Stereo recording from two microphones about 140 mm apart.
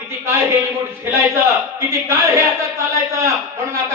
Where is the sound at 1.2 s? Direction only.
20° right (ahead or behind).